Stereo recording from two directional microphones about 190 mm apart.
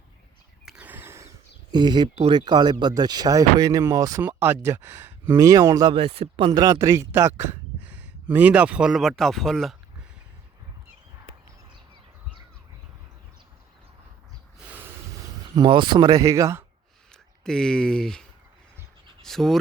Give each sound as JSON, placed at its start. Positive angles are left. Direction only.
{"t": 0.6, "sound": "a sound", "side_deg": -5}
{"t": 1.7, "sound": "speech", "side_deg": -20}
{"t": 5.9, "sound": "speech", "side_deg": -30}
{"t": 15.5, "sound": "speech", "side_deg": -25}
{"t": 17.4, "sound": "speech", "side_deg": 5}